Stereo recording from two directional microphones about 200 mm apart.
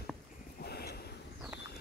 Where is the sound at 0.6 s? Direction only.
50° left (ahead or behind).